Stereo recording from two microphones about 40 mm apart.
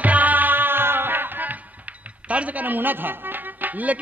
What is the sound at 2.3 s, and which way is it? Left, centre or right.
Music, right.